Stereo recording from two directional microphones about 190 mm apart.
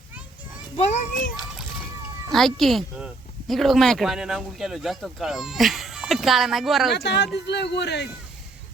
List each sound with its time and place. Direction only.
0.8 s a child's voice: 35° left (ahead or behind)
2.3 s speech: centre (ahead or behind)
6.9 s a man's voice: 60° left (ahead or behind)